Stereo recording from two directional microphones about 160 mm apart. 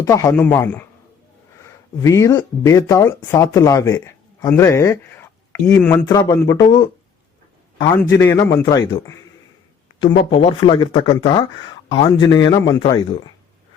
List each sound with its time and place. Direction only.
0.0 s a man's voice: 20° left (ahead or behind)
2.0 s speech: 20° left (ahead or behind)
8.2 s a man's voice: 15° left (ahead or behind)
8.6 s speech: 30° left (ahead or behind)
10.0 s speech: 30° left (ahead or behind)